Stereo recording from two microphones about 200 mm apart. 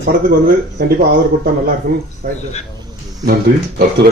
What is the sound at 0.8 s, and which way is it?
Speech, 50° right (ahead or behind).